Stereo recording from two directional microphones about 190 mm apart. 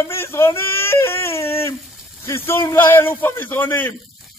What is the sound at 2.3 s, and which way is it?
A man's voice, 10° left (ahead or behind).